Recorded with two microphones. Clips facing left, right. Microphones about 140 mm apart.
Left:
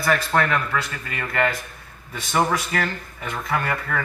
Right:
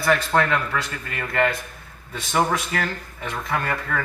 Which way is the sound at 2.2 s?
Centre (ahead or behind).